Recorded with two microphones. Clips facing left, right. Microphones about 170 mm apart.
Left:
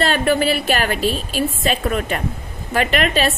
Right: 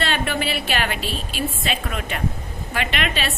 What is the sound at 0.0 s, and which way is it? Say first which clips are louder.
A woman's voice: left 7 dB; 40° left (ahead or behind).